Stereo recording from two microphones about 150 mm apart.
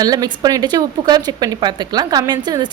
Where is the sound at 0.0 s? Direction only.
25° right (ahead or behind).